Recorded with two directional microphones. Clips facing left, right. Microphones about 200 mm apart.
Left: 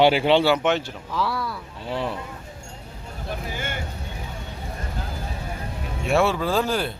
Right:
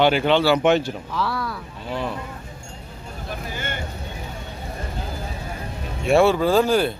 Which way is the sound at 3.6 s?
10° left (ahead or behind).